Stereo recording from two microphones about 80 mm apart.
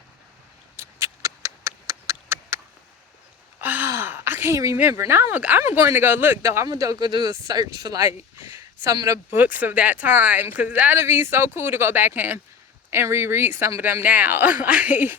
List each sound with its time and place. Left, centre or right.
0.8 s a sound: right
3.6 s sigh: right
3.8 s a sound: right
4.5 s speech: right
4.8 s speech: right
6.7 s speech: right
9.3 s speech: right
10.9 s speech: right